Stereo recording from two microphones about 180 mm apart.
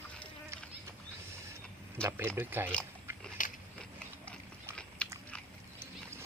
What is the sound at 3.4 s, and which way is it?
Biting, 45° left (ahead or behind).